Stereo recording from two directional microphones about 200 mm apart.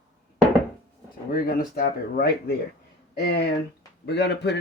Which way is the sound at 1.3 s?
45° left (ahead or behind).